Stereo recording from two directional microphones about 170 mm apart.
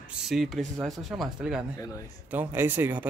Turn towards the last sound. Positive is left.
turn(degrees=-10)  # may be behind; listen again after turning